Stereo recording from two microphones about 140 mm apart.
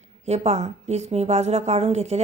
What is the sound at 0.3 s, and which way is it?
A woman's voice, 50° right (ahead or behind).